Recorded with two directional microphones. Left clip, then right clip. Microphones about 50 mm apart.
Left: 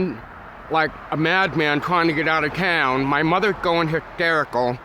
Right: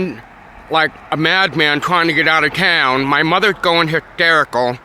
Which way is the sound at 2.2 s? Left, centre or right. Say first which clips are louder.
Right 7 dB; right.